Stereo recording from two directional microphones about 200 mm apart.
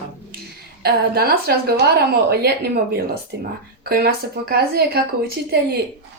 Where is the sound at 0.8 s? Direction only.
50° right (ahead or behind).